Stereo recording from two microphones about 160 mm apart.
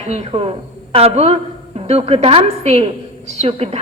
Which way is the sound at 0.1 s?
40° right (ahead or behind).